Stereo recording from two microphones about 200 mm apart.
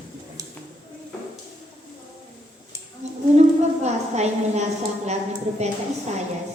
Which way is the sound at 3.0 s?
35° right (ahead or behind).